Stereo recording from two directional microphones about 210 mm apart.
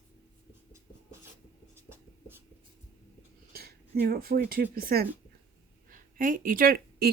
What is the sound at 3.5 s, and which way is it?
Speech, 45° right (ahead or behind).